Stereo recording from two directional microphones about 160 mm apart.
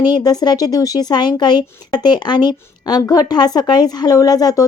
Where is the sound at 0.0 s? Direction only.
25° left (ahead or behind).